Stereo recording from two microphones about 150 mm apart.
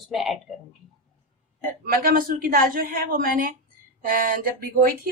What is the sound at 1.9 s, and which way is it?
A woman's voice, 70° right (ahead or behind).